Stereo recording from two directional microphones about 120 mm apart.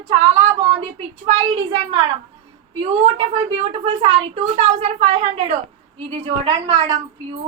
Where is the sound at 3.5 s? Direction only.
55° right (ahead or behind).